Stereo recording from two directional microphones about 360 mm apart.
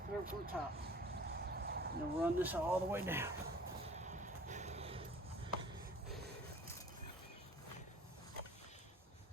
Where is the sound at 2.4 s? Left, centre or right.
Centre.